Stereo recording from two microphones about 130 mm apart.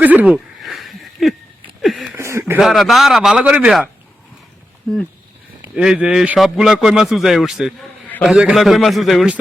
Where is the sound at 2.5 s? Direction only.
Centre (ahead or behind).